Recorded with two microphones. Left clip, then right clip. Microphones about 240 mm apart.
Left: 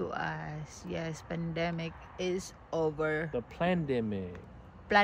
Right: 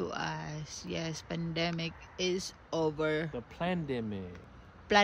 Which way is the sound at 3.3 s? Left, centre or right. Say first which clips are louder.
Left 4 dB; centre.